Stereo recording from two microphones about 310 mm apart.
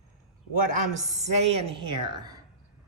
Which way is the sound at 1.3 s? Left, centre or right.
Centre.